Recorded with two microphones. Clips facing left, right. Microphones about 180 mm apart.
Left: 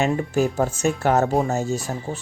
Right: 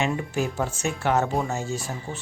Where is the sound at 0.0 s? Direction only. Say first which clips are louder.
Left 5 dB; 45° left (ahead or behind).